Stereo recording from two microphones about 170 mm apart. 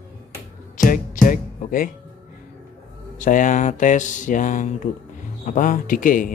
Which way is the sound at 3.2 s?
50° left (ahead or behind).